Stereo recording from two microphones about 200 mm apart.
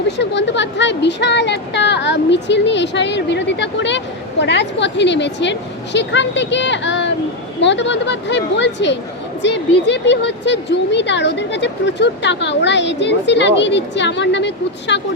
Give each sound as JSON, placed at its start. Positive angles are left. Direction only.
{"t": 0.2, "sound": "speech", "side_deg": 60}